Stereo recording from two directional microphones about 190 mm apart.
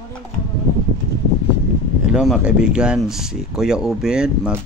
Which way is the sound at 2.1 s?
Centre (ahead or behind).